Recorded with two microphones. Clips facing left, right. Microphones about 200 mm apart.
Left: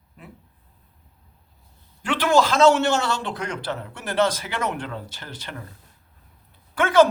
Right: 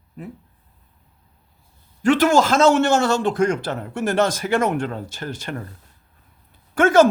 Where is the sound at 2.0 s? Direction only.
45° right (ahead or behind).